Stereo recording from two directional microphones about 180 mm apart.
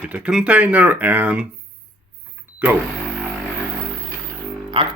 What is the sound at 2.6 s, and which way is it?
Speech, 10° right (ahead or behind).